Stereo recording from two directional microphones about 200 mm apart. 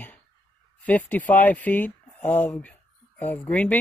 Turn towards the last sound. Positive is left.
turn(degrees=10)  # may be behind; listen again after turning